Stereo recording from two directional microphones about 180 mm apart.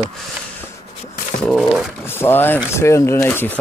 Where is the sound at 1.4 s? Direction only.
Centre (ahead or behind).